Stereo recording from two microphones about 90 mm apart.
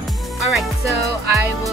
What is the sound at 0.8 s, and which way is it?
Music, 35° right (ahead or behind).